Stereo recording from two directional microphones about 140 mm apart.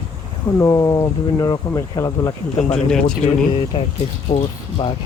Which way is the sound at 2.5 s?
50° left (ahead or behind).